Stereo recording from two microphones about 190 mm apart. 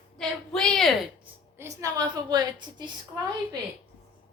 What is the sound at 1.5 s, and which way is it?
A woman's voice, 15° right (ahead or behind).